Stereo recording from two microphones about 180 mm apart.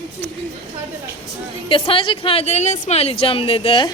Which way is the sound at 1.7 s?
30° left (ahead or behind).